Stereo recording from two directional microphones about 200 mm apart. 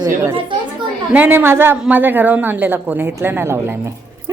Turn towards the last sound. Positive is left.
turn(degrees=-10)  # may be behind; listen again after turning